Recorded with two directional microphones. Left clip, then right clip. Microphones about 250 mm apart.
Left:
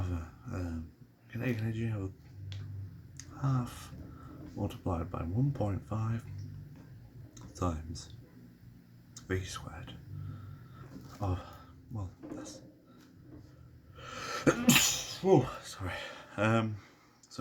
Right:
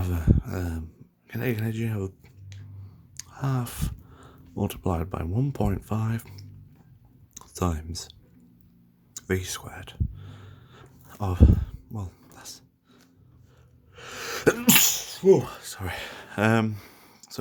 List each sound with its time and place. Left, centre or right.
0.0 s a sound: right
1.3 s speech: right
3.2 s speech: right
7.3 s speech: right
9.1 s speech: right
11.2 s a sound: right
13.9 s sneeze: right